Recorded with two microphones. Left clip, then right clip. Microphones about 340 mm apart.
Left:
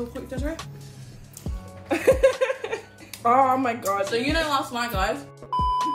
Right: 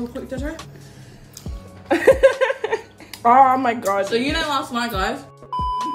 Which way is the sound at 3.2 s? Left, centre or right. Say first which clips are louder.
Right 6 dB; right.